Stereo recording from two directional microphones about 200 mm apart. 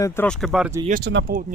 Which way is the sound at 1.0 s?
60° right (ahead or behind).